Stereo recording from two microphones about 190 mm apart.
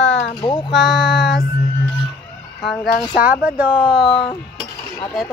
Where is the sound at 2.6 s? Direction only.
Centre (ahead or behind).